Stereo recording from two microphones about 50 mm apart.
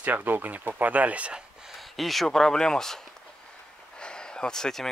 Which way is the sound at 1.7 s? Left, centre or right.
Centre.